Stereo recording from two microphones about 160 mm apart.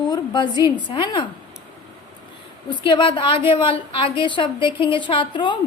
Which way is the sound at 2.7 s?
30° left (ahead or behind).